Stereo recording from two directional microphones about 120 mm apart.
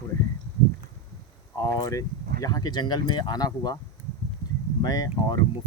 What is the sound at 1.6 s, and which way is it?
Speech, 30° left (ahead or behind).